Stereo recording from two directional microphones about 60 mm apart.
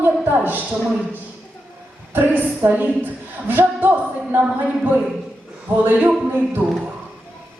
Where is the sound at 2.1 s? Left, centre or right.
Right.